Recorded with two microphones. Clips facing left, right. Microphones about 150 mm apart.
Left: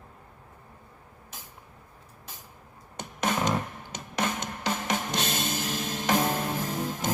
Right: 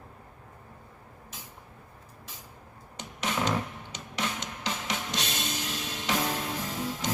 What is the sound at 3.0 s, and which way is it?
Music, 50° left (ahead or behind).